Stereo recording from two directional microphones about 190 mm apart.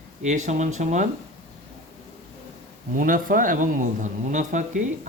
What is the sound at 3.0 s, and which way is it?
Speech, 45° right (ahead or behind).